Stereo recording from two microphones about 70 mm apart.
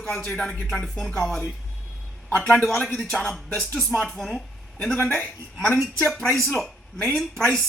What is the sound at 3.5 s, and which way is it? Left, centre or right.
Music, left.